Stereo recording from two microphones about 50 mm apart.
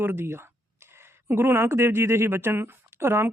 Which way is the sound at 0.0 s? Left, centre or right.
Right.